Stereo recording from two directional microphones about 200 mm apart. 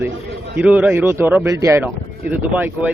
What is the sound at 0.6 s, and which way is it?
A man's voice, 5° right (ahead or behind).